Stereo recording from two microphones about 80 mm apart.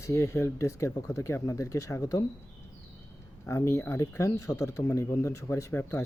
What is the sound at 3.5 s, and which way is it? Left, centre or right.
Speech, left.